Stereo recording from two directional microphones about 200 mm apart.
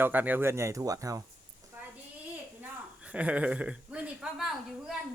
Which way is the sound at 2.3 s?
10° right (ahead or behind).